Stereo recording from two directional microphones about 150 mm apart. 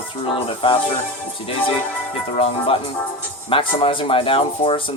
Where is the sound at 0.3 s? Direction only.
35° left (ahead or behind).